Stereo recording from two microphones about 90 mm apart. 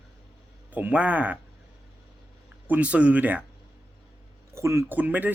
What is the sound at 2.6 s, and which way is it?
Speech, 15° right (ahead or behind).